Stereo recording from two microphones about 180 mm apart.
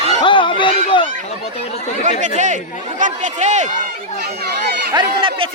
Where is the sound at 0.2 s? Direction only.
25° left (ahead or behind).